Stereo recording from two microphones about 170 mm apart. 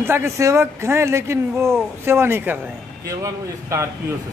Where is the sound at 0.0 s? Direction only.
15° right (ahead or behind).